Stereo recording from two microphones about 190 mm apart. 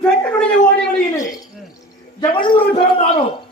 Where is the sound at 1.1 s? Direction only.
15° left (ahead or behind).